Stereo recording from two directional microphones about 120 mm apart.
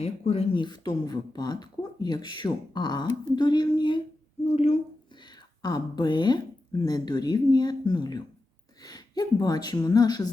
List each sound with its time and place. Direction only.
0.0 s speech: 60° left (ahead or behind)
0.6 s speech: 40° left (ahead or behind)
4.4 s a sound: 65° left (ahead or behind)
5.6 s speech: 35° left (ahead or behind)